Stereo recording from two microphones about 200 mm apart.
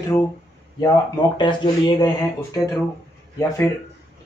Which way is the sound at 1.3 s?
20° left (ahead or behind).